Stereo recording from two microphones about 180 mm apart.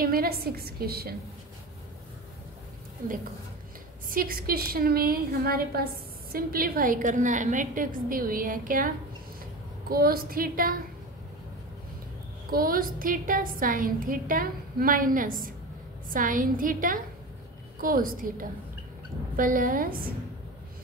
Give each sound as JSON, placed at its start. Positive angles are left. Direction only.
{"t": 0.0, "sound": "a woman's voice", "side_deg": -55}
{"t": 4.1, "sound": "a woman's voice", "side_deg": -55}
{"t": 12.4, "sound": "a woman's voice", "side_deg": -55}